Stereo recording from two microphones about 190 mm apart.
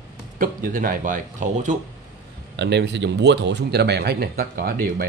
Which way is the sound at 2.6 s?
65° right (ahead or behind).